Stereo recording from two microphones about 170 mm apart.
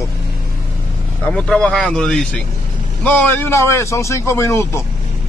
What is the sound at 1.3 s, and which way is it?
A man's voice, 5° left (ahead or behind).